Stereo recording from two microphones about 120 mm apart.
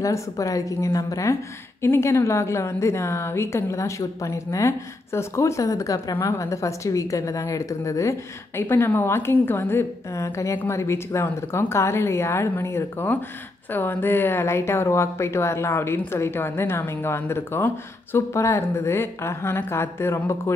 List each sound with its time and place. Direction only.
0.0 s a woman's voice: 25° left (ahead or behind)